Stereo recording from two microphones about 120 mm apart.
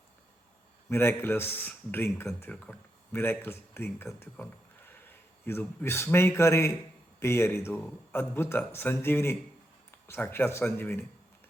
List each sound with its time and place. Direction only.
0.9 s a man's voice: 20° left (ahead or behind)